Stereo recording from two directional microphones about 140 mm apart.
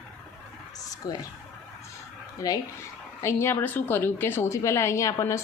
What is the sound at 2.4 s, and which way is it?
A woman's voice, 25° left (ahead or behind).